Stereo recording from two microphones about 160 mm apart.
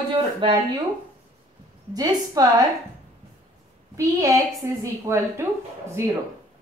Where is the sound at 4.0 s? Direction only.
20° right (ahead or behind).